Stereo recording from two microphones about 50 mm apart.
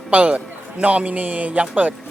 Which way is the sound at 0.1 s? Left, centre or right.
Right.